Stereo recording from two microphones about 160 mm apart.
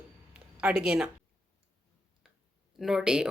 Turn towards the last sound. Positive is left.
turn(degrees=-5)  # may be behind; listen again after turning